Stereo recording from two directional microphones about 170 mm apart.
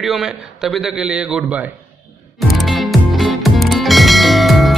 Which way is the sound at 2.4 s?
Centre (ahead or behind).